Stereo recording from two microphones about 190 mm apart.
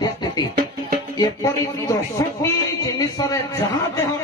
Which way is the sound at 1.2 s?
20° left (ahead or behind).